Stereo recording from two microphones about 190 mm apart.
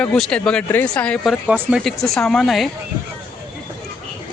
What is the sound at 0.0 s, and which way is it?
Speech, 5° left (ahead or behind).